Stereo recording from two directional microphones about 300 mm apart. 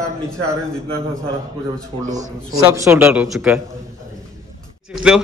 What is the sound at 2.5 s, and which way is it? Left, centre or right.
Speech, centre.